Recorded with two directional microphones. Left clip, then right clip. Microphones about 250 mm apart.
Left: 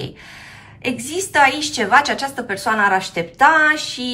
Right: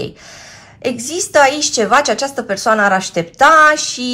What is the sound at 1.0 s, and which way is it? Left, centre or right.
A woman's voice, right.